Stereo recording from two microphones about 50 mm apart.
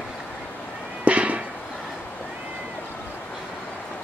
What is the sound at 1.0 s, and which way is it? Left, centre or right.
Music, right.